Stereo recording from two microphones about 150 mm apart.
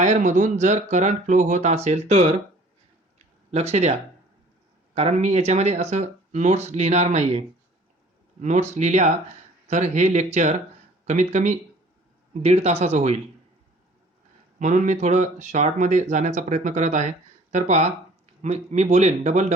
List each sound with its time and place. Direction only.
0.0 s speech: 55° right (ahead or behind)
3.5 s speech: 45° right (ahead or behind)
4.9 s speech: 45° right (ahead or behind)
14.6 s speech: 55° right (ahead or behind)